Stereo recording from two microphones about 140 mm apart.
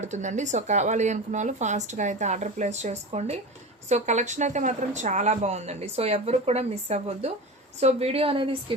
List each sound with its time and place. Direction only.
0.0 s speech: 55° right (ahead or behind); by 8.7 s 40° right (ahead or behind)